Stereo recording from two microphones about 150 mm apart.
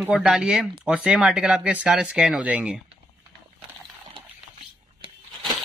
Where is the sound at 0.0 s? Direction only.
5° right (ahead or behind).